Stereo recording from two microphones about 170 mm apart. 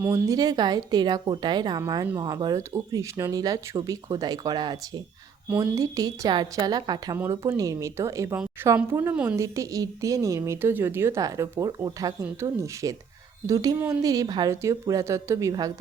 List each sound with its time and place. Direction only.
0.0 s speech: 20° right (ahead or behind)
5.5 s speech: 10° right (ahead or behind)